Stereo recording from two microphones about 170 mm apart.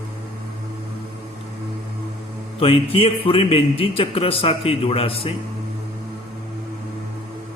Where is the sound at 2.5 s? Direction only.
35° left (ahead or behind).